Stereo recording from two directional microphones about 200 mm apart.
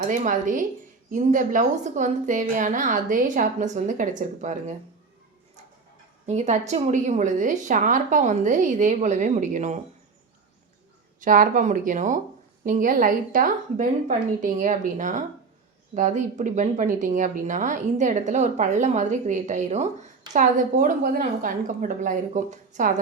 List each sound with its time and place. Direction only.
0.1 s a woman's voice: 40° right (ahead or behind)
6.2 s a woman's voice: 35° right (ahead or behind)
11.2 s a woman's voice: 40° right (ahead or behind)